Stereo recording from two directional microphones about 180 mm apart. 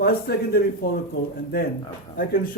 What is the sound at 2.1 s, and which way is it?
Speech, 50° left (ahead or behind).